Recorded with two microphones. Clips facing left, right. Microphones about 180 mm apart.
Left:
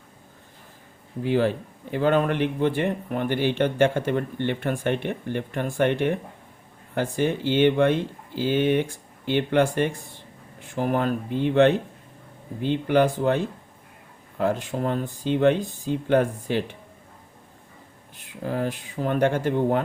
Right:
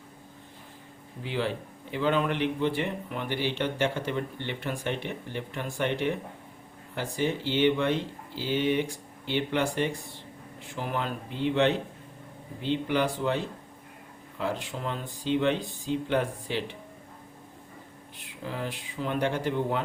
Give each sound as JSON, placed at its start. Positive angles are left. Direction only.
{"t": 1.2, "sound": "a man's voice", "side_deg": 45}
{"t": 18.4, "sound": "a man's voice", "side_deg": 45}